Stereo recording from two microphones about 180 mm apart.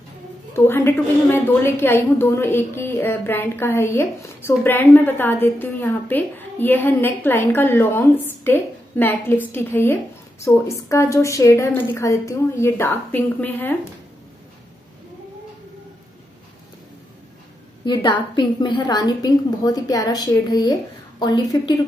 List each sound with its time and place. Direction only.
0.7 s a woman's voice: 10° left (ahead or behind)
18.3 s a woman's voice: 25° left (ahead or behind)